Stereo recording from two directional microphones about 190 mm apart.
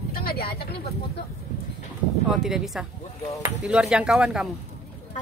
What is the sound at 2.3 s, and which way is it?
Speech, centre (ahead or behind).